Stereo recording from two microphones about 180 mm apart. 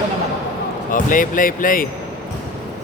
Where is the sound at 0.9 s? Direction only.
50° left (ahead or behind).